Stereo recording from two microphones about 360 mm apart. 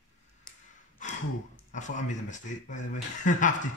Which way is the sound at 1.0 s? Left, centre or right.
Centre.